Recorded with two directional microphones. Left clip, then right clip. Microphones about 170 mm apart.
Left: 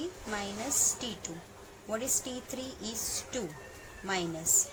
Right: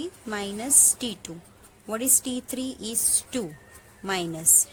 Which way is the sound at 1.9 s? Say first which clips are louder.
Right 6 dB; 60° right (ahead or behind).